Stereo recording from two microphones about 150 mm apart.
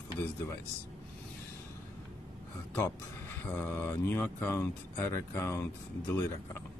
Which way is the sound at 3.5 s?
15° left (ahead or behind).